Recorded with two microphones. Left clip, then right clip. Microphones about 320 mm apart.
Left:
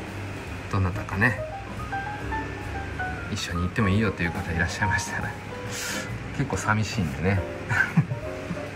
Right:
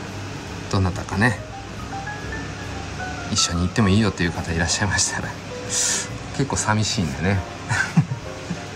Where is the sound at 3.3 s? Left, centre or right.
Centre.